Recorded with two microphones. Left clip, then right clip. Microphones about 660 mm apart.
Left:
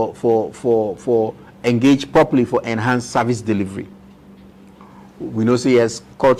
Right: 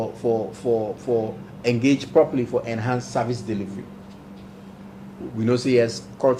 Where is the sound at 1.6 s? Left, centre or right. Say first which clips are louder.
Left 5 dB; left.